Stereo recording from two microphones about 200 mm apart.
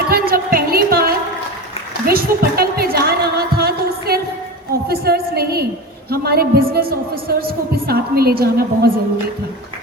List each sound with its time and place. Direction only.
0.1 s music: 45° right (ahead or behind)
2.0 s a sound: 50° right (ahead or behind)
6.1 s a woman's voice: 50° right (ahead or behind)